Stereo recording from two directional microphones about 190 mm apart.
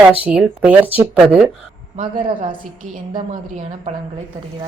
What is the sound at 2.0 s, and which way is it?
Speech, 25° right (ahead or behind).